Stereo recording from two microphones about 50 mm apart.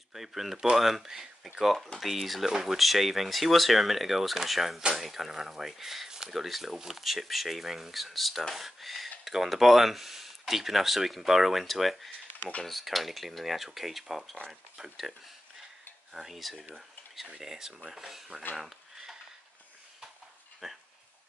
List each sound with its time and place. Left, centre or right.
0.1 s speech: centre
12.4 s speech: left
12.6 s speech: centre
20.6 s speech: centre